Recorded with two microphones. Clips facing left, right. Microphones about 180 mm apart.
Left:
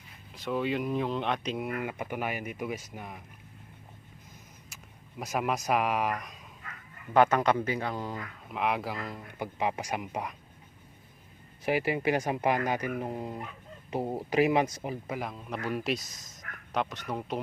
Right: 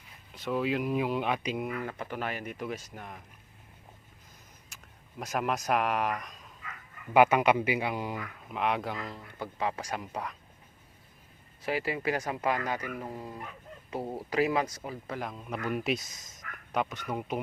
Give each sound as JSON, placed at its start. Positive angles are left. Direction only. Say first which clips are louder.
{"t": 0.3, "sound": "speech", "louder": "even", "side_deg": 0}
{"t": 1.8, "sound": "speech", "louder": "left 2 dB", "side_deg": 10}
{"t": 5.2, "sound": "speech", "louder": "left 1 dB", "side_deg": 0}
{"t": 7.1, "sound": "a man's voice", "louder": "right 1 dB", "side_deg": -10}
{"t": 8.4, "sound": "speech", "louder": "even", "side_deg": 0}
{"t": 9.1, "sound": "speech", "louder": "left 2 dB", "side_deg": 15}
{"t": 11.6, "sound": "speech", "louder": "left 3 dB", "side_deg": 20}
{"t": 15.2, "sound": "speech", "louder": "even", "side_deg": 0}